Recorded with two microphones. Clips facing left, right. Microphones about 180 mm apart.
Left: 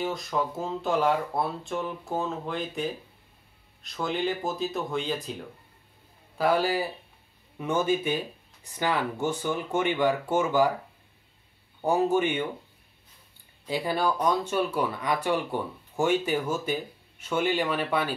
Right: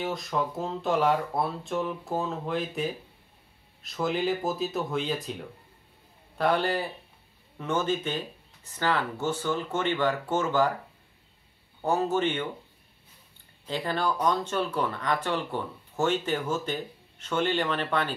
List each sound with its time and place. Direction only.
0.0 s speech: centre (ahead or behind)
11.8 s speech: 10° left (ahead or behind)
13.7 s speech: 10° left (ahead or behind)